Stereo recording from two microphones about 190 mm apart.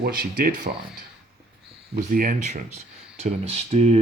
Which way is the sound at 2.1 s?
45° right (ahead or behind).